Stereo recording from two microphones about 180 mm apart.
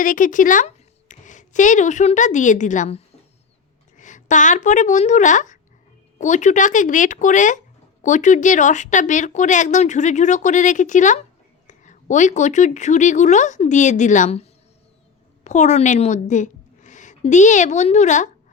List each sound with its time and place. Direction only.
0.0 s a woman's voice: 50° left (ahead or behind)
15.4 s a woman's voice: 40° left (ahead or behind)